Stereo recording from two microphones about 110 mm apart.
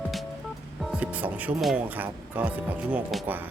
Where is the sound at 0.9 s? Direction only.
15° right (ahead or behind).